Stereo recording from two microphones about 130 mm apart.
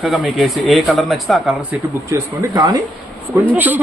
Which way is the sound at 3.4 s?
15° right (ahead or behind).